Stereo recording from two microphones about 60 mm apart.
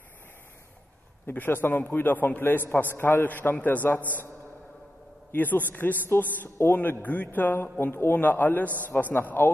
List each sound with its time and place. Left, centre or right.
1.2 s a man's voice: left
5.3 s a man's voice: left